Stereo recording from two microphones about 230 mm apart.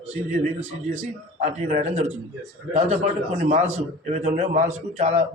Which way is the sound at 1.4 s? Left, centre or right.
Right.